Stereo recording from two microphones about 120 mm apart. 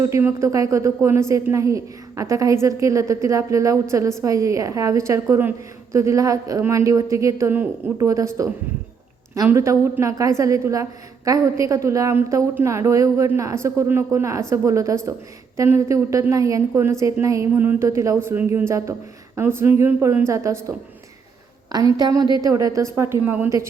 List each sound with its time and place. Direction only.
0.0 s a woman's voice: 20° right (ahead or behind)